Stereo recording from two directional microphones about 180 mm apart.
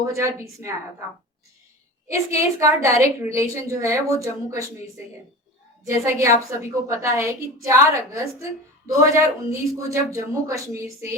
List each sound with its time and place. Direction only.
0.0 s a woman's voice: 15° right (ahead or behind)
2.0 s a woman's voice: 15° right (ahead or behind)
5.8 s a woman's voice: 15° right (ahead or behind)